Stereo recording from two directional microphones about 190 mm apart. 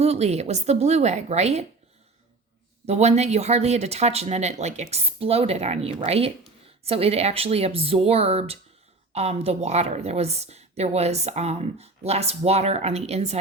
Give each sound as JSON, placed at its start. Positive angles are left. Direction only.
{"t": 0.0, "sound": "speech", "side_deg": -35}
{"t": 2.8, "sound": "speech", "side_deg": -35}